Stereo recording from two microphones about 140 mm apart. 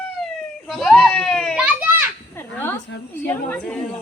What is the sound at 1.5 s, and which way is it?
Children playing, 10° right (ahead or behind).